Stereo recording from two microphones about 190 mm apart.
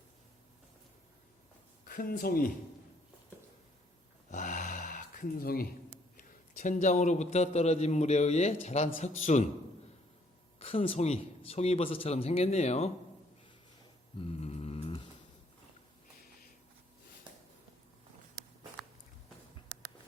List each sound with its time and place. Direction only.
1.8 s speech: 45° left (ahead or behind)
4.3 s gasp: 45° left (ahead or behind)
6.1 s a man's voice: 40° left (ahead or behind)
10.6 s a man's voice: 30° left (ahead or behind)
14.2 s mantra: 30° left (ahead or behind)